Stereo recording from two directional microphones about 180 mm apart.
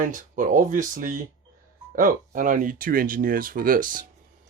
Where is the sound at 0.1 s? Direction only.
45° right (ahead or behind).